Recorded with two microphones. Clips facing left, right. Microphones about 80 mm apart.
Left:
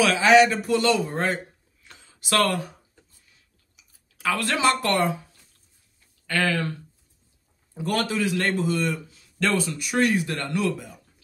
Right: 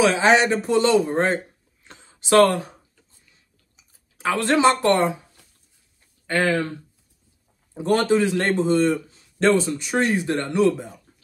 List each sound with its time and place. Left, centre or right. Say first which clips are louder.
0.0 s a man's voice: even; right
1.9 s a sound: right 7 dB; right
3.7 s speech: right 2 dB; right
6.2 s speech: right 3 dB; right
7.7 s a man's voice: right 7 dB; right